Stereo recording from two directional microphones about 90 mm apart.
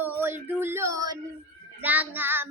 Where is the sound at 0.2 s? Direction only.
25° right (ahead or behind); by 1.2 s 40° right (ahead or behind).